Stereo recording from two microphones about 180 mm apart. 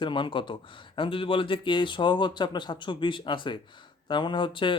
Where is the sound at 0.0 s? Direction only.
25° left (ahead or behind).